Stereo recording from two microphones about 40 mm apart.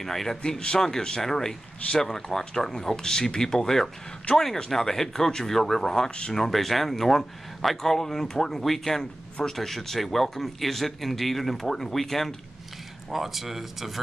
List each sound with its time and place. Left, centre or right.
0.0 s speech: centre
0.4 s speech: left
6.0 s speech: left
6.3 s speech: centre
13.1 s speech: centre